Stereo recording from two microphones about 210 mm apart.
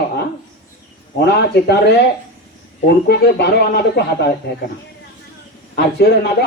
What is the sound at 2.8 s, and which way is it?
Speech, 50° left (ahead or behind).